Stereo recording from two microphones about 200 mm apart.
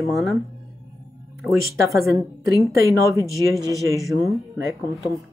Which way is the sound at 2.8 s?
15° right (ahead or behind).